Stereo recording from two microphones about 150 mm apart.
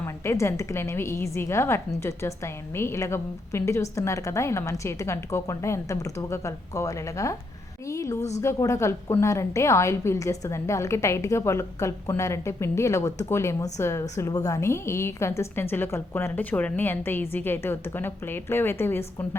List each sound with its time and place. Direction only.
0.0 s a woman's voice: 15° left (ahead or behind)